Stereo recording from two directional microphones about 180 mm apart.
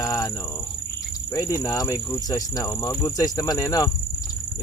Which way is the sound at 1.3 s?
20° left (ahead or behind).